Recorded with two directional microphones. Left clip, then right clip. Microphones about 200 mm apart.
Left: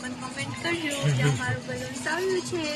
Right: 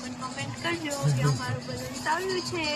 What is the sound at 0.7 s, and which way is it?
A man's voice, centre (ahead or behind).